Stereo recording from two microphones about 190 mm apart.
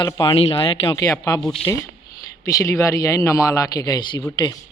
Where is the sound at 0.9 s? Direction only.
15° left (ahead or behind).